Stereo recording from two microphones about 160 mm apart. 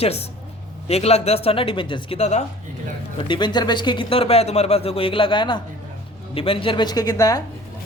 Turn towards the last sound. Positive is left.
turn(degrees=20)  # may be behind; listen again after turning